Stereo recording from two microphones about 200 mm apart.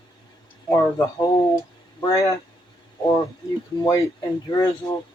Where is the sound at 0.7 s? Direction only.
15° left (ahead or behind).